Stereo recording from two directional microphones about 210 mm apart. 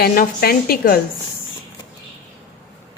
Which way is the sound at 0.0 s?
40° left (ahead or behind).